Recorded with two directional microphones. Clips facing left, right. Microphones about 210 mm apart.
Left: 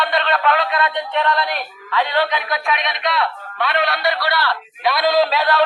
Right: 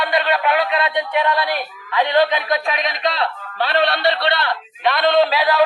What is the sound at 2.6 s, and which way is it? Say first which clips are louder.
Speech: right 1 dB; 30° right (ahead or behind).